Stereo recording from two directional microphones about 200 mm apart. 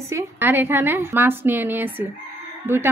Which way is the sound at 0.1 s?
10° right (ahead or behind).